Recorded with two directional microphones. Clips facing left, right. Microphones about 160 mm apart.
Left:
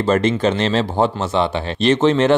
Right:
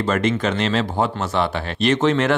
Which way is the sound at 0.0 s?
30° left (ahead or behind).